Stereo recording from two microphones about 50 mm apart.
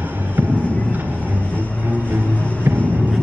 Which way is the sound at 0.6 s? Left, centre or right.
Left.